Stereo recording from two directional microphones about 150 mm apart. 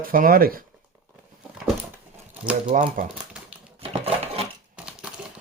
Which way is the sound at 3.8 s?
40° right (ahead or behind).